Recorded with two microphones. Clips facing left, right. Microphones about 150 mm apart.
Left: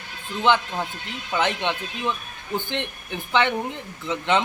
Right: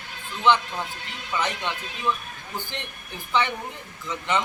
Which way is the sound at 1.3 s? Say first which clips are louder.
Left 4 dB; 65° left (ahead or behind).